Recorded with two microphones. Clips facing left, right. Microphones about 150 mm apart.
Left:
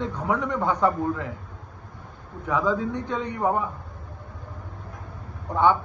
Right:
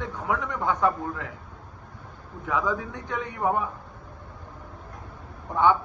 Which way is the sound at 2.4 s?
20° left (ahead or behind).